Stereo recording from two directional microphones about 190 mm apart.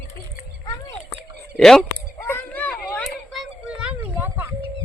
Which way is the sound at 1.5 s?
5° left (ahead or behind).